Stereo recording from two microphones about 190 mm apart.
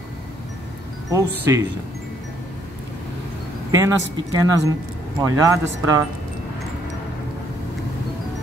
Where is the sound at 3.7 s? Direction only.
20° right (ahead or behind).